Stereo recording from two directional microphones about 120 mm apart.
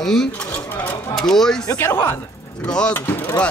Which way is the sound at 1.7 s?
20° left (ahead or behind).